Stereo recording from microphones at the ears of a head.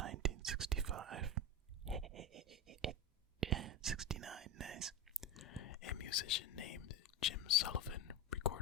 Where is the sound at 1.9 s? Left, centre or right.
Right.